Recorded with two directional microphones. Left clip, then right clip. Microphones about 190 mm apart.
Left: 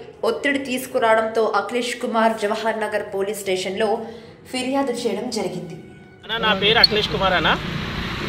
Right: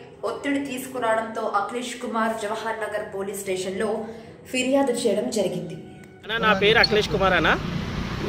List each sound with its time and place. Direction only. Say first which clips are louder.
0.2 s a woman's voice: left 6 dB; 20° left (ahead or behind)
4.5 s a woman's voice: right 1 dB; 5° left (ahead or behind)
6.2 s speech: left 1 dB; 25° right (ahead or behind)